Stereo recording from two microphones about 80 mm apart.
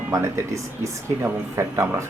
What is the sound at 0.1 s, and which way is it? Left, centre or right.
Speech, right.